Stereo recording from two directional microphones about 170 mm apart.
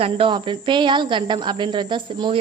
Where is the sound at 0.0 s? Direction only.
30° right (ahead or behind).